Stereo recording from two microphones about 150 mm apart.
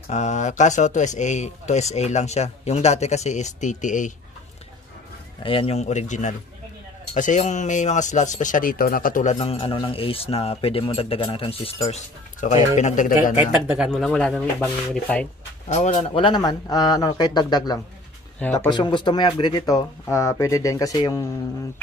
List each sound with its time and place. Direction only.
0.1 s speech: 50° left (ahead or behind)
5.4 s speech: 35° left (ahead or behind); by 9.4 s 60° left (ahead or behind)
9.4 s speech: 40° left (ahead or behind)
12.4 s speech: 55° left (ahead or behind)
13.8 s speech: 5° left (ahead or behind)
15.7 s speech: 50° left (ahead or behind)
16.1 s speech: 35° left (ahead or behind)
18.4 s speech: 15° left (ahead or behind)
18.7 s speech: 30° left (ahead or behind)